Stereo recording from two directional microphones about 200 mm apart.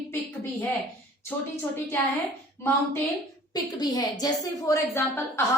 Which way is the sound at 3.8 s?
20° left (ahead or behind).